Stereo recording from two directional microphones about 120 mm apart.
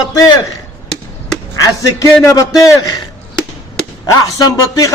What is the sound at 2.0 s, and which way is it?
Speech, 25° left (ahead or behind).